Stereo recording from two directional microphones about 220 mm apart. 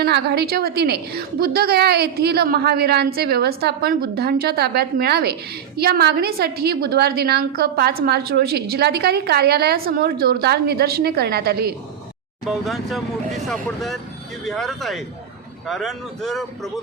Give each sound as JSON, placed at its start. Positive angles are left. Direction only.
{"t": 0.0, "sound": "a woman's voice", "side_deg": -50}
{"t": 12.5, "sound": "speech", "side_deg": 0}